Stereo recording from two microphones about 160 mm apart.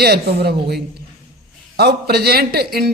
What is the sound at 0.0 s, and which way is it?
A man's voice, 80° right.